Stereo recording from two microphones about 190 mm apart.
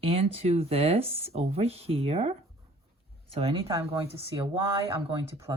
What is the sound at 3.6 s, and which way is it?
Speech, 20° right (ahead or behind).